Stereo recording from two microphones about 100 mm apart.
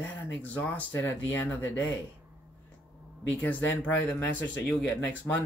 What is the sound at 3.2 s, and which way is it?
Speech, 15° left (ahead or behind).